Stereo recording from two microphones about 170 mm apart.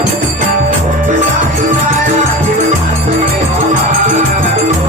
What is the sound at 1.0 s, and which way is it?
Music, 50° right (ahead or behind).